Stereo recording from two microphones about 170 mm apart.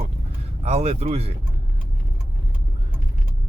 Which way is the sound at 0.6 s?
40° right (ahead or behind).